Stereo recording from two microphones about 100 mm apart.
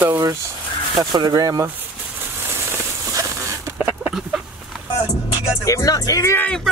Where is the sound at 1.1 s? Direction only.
40° right (ahead or behind).